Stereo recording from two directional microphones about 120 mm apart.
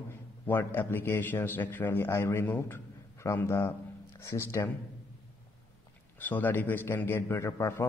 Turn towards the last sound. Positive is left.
turn(degrees=25)  # may be behind; listen again after turning